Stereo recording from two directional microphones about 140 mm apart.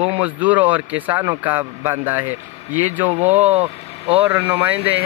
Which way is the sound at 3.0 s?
50° right (ahead or behind).